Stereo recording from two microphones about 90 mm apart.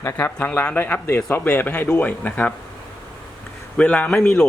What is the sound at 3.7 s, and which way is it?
Speech, 15° left (ahead or behind).